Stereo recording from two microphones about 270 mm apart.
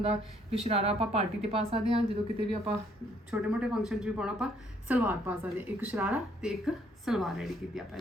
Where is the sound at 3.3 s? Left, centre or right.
Centre.